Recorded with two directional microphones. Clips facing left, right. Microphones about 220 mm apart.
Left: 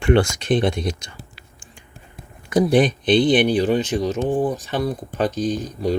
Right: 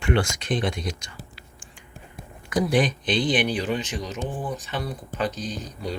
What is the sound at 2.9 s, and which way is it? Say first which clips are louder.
Speech: left 8 dB; 60° left (ahead or behind).